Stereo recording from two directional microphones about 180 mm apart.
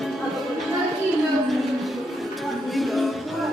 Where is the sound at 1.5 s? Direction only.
Centre (ahead or behind).